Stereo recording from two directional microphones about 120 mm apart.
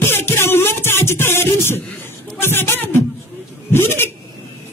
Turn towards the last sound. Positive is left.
turn(degrees=20)  # may be behind; listen again after turning